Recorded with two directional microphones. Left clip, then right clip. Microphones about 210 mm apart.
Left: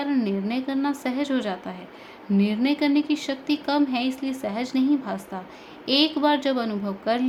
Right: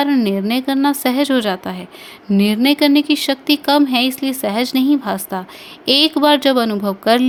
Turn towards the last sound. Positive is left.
turn(degrees=-35)  # may be behind; listen again after turning